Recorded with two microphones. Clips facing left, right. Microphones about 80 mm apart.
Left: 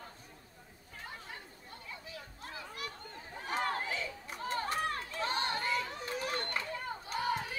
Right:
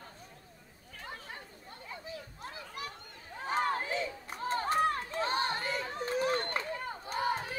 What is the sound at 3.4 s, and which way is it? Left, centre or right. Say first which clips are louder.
Run: right 3 dB; right.